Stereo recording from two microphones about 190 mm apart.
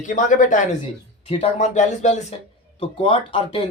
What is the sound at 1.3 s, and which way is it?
Speech, 30° left (ahead or behind).